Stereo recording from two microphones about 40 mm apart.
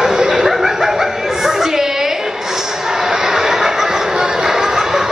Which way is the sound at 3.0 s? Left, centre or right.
Centre.